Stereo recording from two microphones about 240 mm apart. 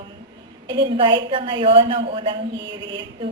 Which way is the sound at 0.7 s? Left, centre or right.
Centre.